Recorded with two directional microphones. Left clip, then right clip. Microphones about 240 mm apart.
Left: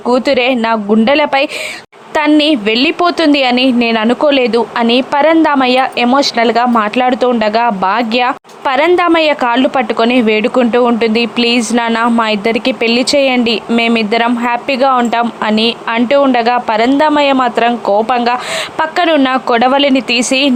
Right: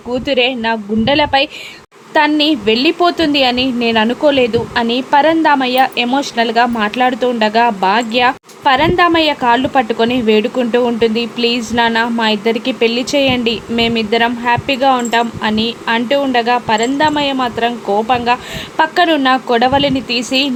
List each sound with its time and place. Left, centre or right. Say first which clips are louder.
0.1 s a woman's voice: left 4 dB; centre